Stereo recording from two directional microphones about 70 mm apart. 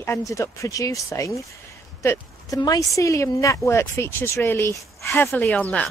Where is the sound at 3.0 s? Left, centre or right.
Left.